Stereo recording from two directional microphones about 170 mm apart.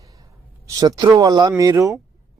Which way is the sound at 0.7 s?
20° right (ahead or behind).